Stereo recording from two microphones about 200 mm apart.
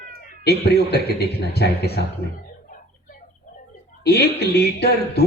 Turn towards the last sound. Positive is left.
turn(degrees=55)  # may be behind; listen again after turning